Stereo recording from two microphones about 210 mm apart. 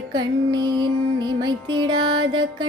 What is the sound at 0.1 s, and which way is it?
Music, 20° right (ahead or behind).